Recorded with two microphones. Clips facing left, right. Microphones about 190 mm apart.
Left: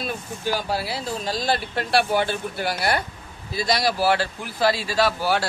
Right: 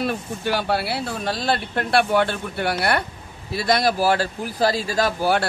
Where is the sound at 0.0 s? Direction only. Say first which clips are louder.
Right 4 dB; 65° right (ahead or behind).